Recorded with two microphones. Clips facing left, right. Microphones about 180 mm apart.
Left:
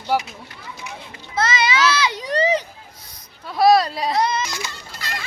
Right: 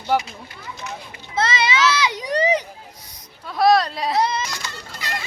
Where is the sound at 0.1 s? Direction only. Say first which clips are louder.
Right 1 dB; 5° left (ahead or behind).